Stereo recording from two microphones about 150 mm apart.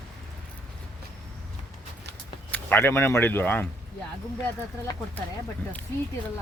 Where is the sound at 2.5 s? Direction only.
15° left (ahead or behind).